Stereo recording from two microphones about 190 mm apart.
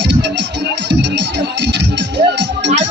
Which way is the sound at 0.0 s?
65° right (ahead or behind).